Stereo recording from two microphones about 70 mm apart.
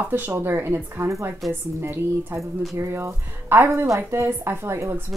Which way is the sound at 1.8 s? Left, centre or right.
Right.